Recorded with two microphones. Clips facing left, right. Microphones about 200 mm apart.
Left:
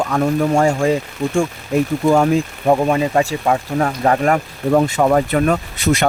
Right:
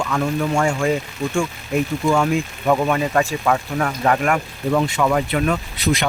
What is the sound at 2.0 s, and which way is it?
Speech, 40° left (ahead or behind).